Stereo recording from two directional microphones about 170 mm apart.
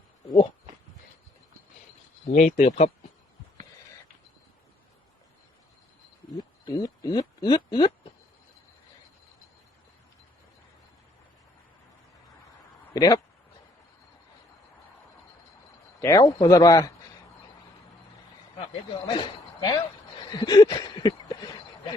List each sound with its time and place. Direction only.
2.3 s speech: 45° left (ahead or behind)
6.7 s speech: 20° left (ahead or behind)
12.9 s speech: 20° left (ahead or behind)
16.0 s a sound: 20° left (ahead or behind)
19.0 s speech: 25° left (ahead or behind)
20.3 s a sound: 25° left (ahead or behind)